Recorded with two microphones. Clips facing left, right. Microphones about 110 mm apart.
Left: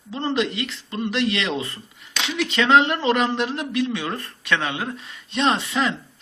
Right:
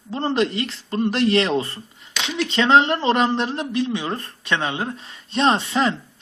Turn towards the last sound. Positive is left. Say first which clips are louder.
# right 2 dB
turn(degrees=-35)  # may be behind; listen again after turning